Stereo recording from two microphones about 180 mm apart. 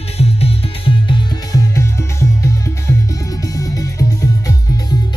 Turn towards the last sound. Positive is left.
turn(degrees=20)  # may be behind; listen again after turning